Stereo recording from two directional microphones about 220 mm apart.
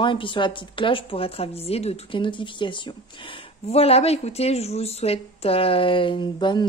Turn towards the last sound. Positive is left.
turn(degrees=20)  # may be behind; listen again after turning